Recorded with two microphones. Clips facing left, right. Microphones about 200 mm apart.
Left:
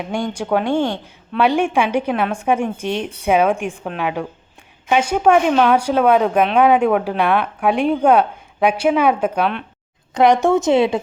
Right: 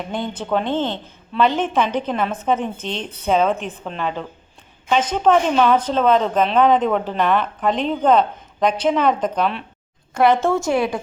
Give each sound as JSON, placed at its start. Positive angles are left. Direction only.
{"t": 0.0, "sound": "a woman's voice", "side_deg": 10}
{"t": 10.2, "sound": "a woman's voice", "side_deg": 15}